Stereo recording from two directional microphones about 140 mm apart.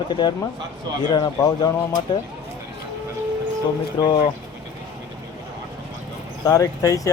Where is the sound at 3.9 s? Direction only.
30° left (ahead or behind).